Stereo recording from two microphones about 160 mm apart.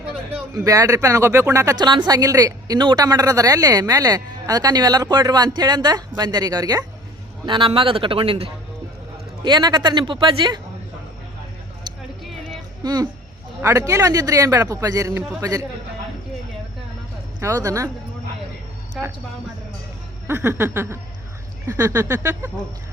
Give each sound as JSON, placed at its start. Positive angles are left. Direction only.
{"t": 0.5, "sound": "a man's voice", "side_deg": -20}
{"t": 12.8, "sound": "a child's voice", "side_deg": -25}
{"t": 17.4, "sound": "speech", "side_deg": -20}
{"t": 19.0, "sound": "speech", "side_deg": 0}
{"t": 20.2, "sound": "a sound", "side_deg": -15}